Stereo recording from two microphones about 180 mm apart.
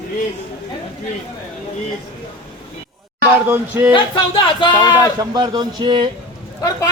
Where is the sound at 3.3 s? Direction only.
10° right (ahead or behind).